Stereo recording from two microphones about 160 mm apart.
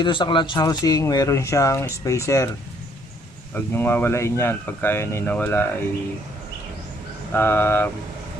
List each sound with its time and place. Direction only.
0.0 s speech: 30° left (ahead or behind)
3.5 s speech: 15° left (ahead or behind)
7.3 s speech: 15° left (ahead or behind)